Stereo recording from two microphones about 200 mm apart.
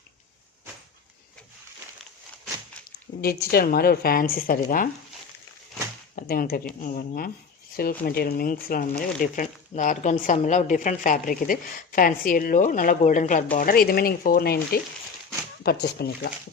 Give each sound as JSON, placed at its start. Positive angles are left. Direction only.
{"t": 3.2, "sound": "a woman's voice", "side_deg": 50}
{"t": 6.1, "sound": "a woman's voice", "side_deg": 45}